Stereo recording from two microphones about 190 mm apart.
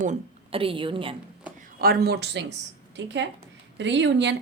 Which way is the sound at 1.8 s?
55° right (ahead or behind).